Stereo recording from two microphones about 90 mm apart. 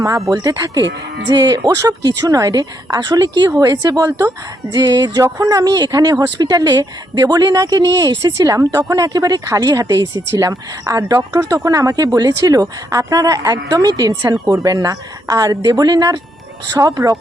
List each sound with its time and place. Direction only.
0.3 s a woman's voice: 40° right (ahead or behind)